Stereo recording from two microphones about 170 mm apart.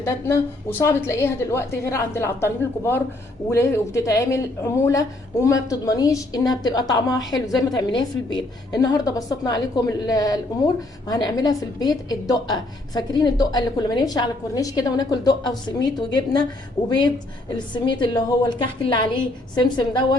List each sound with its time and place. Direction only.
0.0 s a woman's voice: 15° left (ahead or behind)